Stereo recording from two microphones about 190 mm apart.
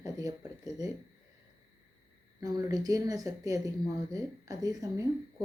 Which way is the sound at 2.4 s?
20° right (ahead or behind).